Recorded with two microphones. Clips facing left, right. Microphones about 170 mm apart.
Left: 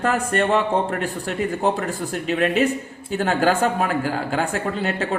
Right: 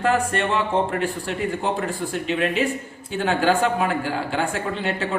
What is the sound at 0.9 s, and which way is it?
Speech, 40° left (ahead or behind).